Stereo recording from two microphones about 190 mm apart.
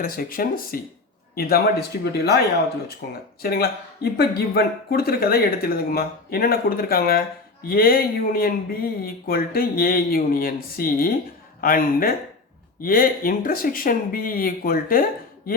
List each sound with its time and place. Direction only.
0.0 s speech: 50° left (ahead or behind)